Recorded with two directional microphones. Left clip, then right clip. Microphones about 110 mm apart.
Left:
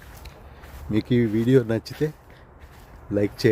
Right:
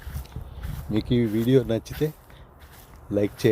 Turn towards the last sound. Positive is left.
turn(degrees=10)  # may be behind; listen again after turning